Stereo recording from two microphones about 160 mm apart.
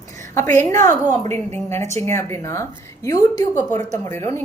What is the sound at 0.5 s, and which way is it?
Speech, 15° left (ahead or behind).